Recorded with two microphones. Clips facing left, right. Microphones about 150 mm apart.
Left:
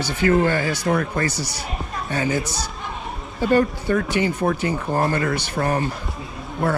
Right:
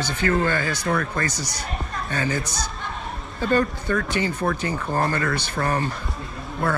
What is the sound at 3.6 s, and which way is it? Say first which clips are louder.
Speech: left 3 dB; 30° left (ahead or behind).